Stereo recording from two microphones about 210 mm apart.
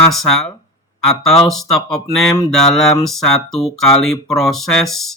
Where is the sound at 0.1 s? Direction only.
Centre (ahead or behind).